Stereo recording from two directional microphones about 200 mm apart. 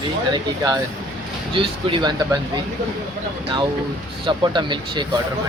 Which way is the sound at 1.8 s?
25° right (ahead or behind).